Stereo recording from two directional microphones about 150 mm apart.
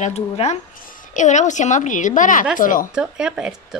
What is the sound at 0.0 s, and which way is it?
A woman's voice, 50° left (ahead or behind).